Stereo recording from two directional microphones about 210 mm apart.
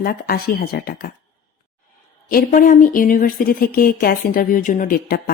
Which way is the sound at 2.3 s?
40° left (ahead or behind).